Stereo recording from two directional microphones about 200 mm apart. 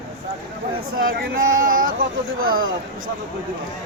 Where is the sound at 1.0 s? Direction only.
50° right (ahead or behind).